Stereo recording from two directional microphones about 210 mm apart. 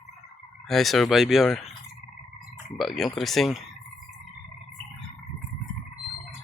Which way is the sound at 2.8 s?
Centre (ahead or behind).